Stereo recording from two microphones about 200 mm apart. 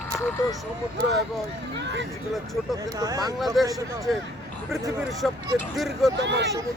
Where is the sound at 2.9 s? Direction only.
15° right (ahead or behind).